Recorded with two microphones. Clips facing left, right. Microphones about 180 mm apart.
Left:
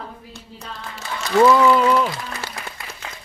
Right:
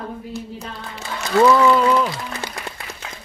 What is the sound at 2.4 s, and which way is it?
Applause, 15° right (ahead or behind).